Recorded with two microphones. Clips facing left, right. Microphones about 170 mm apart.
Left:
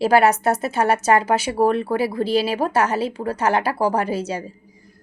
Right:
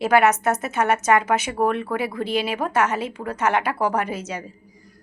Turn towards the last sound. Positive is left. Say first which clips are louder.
# left 4 dB
turn(degrees=30)  # may be behind; listen again after turning